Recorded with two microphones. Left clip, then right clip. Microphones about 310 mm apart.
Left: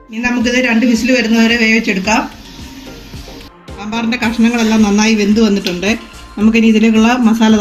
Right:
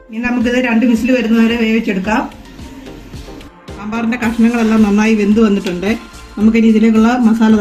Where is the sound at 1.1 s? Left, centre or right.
Right.